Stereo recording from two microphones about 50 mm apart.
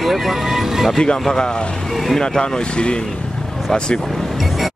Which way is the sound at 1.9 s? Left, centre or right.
Centre.